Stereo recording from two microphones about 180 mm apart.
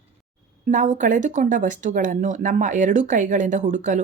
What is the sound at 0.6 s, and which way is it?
Speech, 45° right (ahead or behind).